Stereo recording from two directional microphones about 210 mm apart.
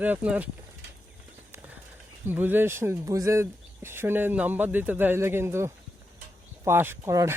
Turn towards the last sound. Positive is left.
turn(degrees=-15)  # may be behind; listen again after turning